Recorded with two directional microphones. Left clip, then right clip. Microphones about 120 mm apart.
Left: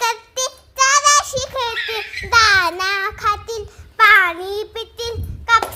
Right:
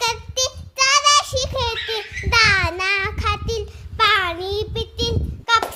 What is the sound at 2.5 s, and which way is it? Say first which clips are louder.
Child singing: left 3 dB; 5° right (ahead or behind).